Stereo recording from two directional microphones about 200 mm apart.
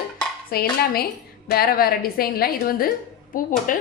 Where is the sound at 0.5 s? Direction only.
50° left (ahead or behind).